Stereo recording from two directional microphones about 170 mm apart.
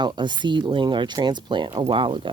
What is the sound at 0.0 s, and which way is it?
Speech, 25° right (ahead or behind).